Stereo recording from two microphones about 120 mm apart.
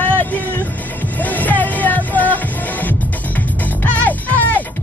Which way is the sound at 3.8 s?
15° left (ahead or behind).